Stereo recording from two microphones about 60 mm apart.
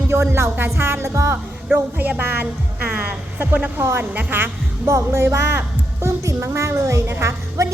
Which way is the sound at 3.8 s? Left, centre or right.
Right.